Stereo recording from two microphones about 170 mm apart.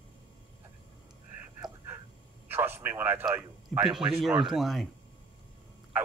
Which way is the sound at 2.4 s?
10° right (ahead or behind).